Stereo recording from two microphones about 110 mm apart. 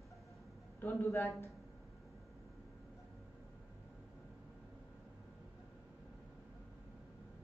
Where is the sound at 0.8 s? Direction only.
25° left (ahead or behind).